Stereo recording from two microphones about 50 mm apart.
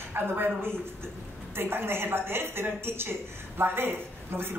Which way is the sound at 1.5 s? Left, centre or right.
Right.